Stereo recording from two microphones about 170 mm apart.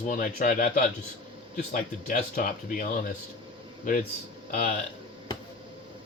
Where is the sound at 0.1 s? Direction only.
50° left (ahead or behind).